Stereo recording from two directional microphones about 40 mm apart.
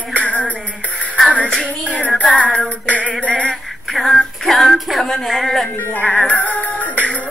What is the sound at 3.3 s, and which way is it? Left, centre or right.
Music, left.